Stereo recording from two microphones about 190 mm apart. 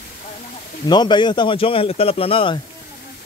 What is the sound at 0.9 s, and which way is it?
A man's voice, 25° left (ahead or behind).